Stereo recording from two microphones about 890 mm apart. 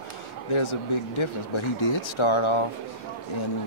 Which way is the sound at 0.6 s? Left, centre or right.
Left.